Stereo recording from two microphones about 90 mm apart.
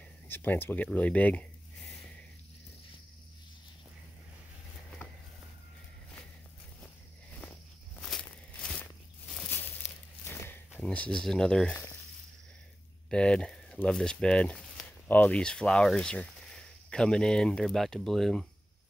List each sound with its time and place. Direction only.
0.3 s speech: 25° left (ahead or behind)
7.3 s walk: 20° left (ahead or behind)
8.0 s a sound: 10° left (ahead or behind)
9.5 s a sound: 20° left (ahead or behind)
10.7 s speech: 15° left (ahead or behind)
13.1 s speech: 10° left (ahead or behind)